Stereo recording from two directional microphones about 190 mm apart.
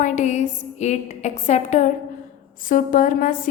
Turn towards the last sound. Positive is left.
turn(degrees=45)  # may be behind; listen again after turning